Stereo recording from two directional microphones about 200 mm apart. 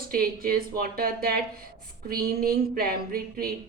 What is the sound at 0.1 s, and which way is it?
A woman's voice, 45° right (ahead or behind).